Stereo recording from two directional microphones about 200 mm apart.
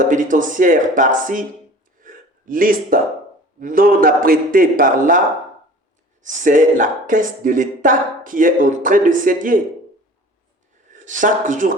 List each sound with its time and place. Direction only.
0.0 s speech: 40° right (ahead or behind)
2.0 s gasp: 45° right (ahead or behind)
3.6 s a man's voice: 45° right (ahead or behind)
6.2 s speech: 40° right (ahead or behind)
10.9 s speech: 40° right (ahead or behind)